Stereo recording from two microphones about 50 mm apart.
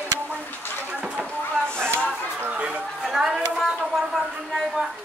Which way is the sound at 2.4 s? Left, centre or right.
Right.